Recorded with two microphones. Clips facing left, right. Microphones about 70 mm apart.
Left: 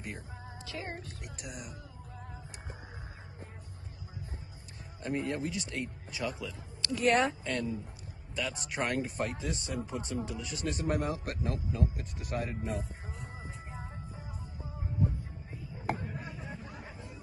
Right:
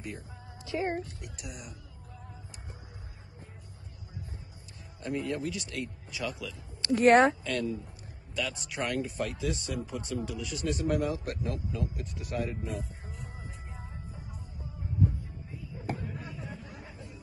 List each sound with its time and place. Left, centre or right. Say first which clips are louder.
0.7 s speech: right 10 dB; right
1.2 s a man's voice: even; left
5.0 s speech: right 1 dB; left
6.9 s speech: right 7 dB; right
7.4 s a man's voice: right 2 dB; left